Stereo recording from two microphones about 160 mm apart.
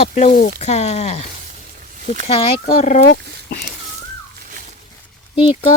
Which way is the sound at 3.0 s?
75° left (ahead or behind).